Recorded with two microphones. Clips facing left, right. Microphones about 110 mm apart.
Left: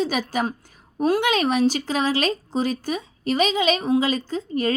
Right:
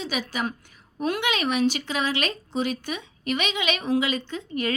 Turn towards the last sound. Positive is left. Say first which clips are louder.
# left 5 dB
turn(degrees=35)  # may be behind; listen again after turning